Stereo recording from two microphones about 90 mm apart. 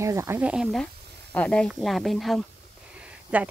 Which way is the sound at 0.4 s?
15° right (ahead or behind).